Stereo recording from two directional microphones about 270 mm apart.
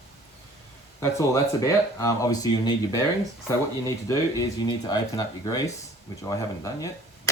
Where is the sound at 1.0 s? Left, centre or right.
Centre.